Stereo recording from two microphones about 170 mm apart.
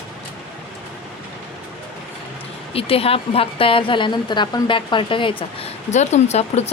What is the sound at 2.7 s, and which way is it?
A woman's voice, 35° left (ahead or behind).